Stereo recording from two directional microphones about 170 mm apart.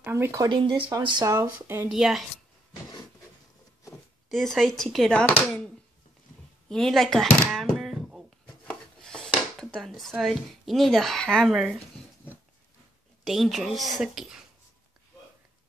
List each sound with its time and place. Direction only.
0.0 s speech: 15° right (ahead or behind)
0.5 s speech: 30° right (ahead or behind)
1.9 s a woman's voice: centre (ahead or behind)
4.3 s a woman's voice: centre (ahead or behind)
6.7 s speech: 5° left (ahead or behind)
13.2 s a woman's voice: centre (ahead or behind)